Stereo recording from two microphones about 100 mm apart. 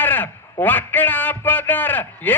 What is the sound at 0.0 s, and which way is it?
A man's voice, 20° left (ahead or behind).